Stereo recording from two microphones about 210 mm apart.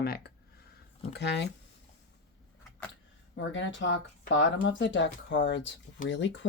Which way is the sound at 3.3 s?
60° left (ahead or behind).